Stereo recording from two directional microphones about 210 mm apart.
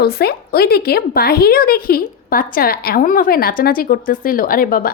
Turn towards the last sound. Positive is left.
turn(degrees=45)  # may be behind; listen again after turning